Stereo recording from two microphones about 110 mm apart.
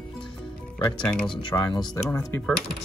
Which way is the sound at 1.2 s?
45° left (ahead or behind).